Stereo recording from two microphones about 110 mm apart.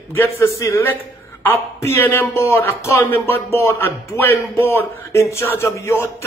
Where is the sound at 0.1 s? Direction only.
20° left (ahead or behind).